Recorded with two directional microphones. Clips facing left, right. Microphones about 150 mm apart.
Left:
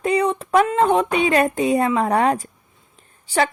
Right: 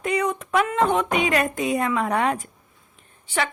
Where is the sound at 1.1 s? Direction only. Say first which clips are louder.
Left 4 dB; 30° left (ahead or behind).